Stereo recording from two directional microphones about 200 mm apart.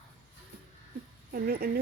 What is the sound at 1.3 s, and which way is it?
Speech, 50° right (ahead or behind).